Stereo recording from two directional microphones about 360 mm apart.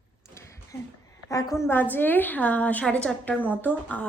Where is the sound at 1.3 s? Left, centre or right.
Centre.